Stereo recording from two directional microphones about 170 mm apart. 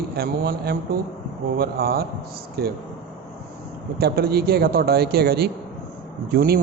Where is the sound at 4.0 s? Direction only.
70° right (ahead or behind).